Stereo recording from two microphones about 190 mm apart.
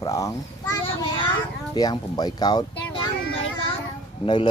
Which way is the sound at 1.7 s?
20° left (ahead or behind).